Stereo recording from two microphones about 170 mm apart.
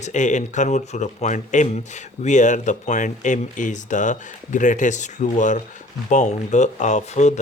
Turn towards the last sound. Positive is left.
turn(degrees=40)  # may be behind; listen again after turning